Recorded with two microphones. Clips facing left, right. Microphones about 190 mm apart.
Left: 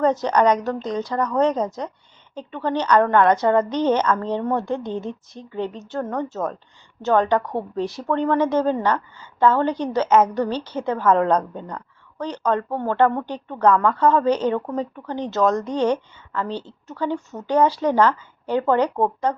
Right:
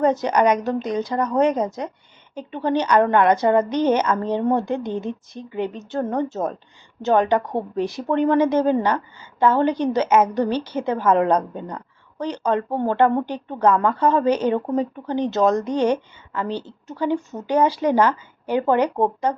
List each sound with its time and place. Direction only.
0.0 s a woman's voice: 10° right (ahead or behind)